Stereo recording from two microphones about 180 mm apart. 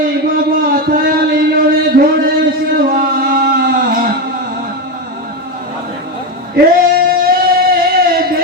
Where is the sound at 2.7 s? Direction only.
55° right (ahead or behind).